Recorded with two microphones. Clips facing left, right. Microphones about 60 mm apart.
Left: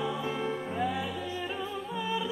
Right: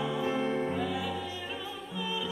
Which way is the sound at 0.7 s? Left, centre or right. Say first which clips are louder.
Left 2 dB; centre.